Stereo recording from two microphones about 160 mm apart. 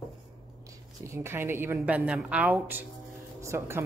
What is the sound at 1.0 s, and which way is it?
Speech, 15° right (ahead or behind).